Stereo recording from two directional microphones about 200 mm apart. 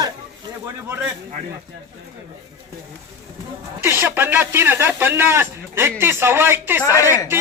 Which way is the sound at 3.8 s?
10° right (ahead or behind).